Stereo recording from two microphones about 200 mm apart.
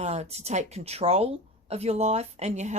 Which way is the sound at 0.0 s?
30° right (ahead or behind).